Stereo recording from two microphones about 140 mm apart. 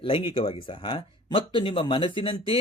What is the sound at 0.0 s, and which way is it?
Speech, 40° left (ahead or behind).